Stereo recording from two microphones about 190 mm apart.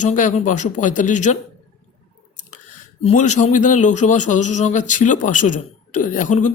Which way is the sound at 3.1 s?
40° left (ahead or behind).